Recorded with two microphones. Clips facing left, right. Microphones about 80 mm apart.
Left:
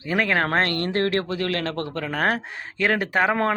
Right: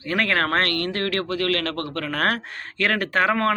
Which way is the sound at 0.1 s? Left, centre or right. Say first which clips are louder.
Even; centre.